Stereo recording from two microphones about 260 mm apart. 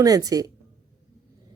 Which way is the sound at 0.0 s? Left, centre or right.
Centre.